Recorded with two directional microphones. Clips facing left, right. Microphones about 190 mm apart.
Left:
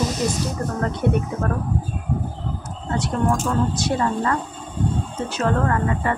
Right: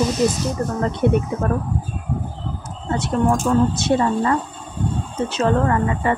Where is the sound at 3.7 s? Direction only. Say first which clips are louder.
Right 4 dB; 20° right (ahead or behind).